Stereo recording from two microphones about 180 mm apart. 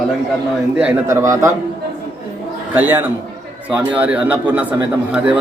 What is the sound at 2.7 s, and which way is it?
Speech, 10° right (ahead or behind).